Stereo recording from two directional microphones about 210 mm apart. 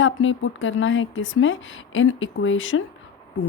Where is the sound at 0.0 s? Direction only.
65° left (ahead or behind).